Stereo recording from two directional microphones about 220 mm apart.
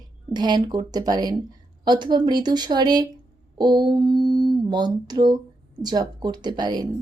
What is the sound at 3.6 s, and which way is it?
Mantra, 20° right (ahead or behind).